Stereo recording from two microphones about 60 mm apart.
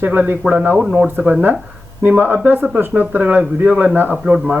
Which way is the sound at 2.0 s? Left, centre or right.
Right.